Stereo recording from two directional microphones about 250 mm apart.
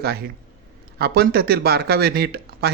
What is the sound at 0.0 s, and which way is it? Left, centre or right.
Speech, right.